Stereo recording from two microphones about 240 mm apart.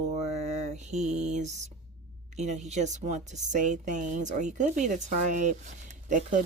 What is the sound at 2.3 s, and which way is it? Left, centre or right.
Speech, right.